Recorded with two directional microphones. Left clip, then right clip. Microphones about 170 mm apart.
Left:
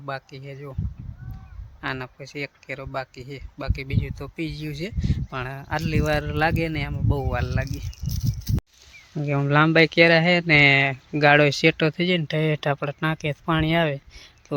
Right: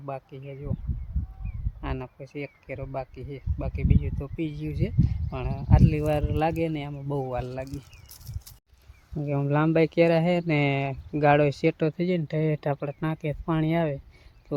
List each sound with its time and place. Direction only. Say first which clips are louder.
0.1 s speech: left 3 dB; centre (ahead or behind)
1.8 s speech: left 6 dB; centre (ahead or behind)
9.2 s speech: left 6 dB; 10° left (ahead or behind)